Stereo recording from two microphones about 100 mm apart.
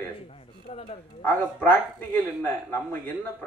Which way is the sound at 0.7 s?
90° left.